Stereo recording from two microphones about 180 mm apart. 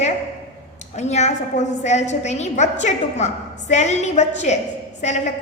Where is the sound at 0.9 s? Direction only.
40° left (ahead or behind).